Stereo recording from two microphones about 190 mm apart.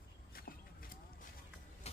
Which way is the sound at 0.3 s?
50° left (ahead or behind).